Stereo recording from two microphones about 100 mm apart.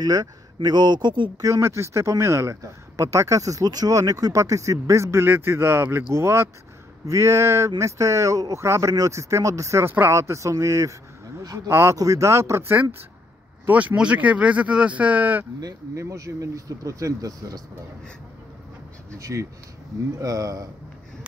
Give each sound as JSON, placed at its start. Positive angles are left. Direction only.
{"t": 0.0, "sound": "speech", "side_deg": -40}
{"t": 1.4, "sound": "speech", "side_deg": -30}
{"t": 15.6, "sound": "speech", "side_deg": -30}
{"t": 19.1, "sound": "speech", "side_deg": -30}